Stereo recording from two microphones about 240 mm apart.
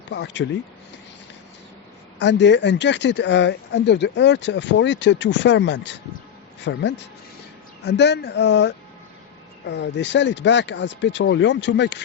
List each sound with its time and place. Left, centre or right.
0.1 s speech: left
2.1 s speech: left
7.9 s speech: left